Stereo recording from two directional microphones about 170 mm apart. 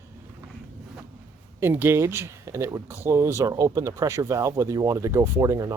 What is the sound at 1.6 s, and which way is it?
Speech, 10° right (ahead or behind).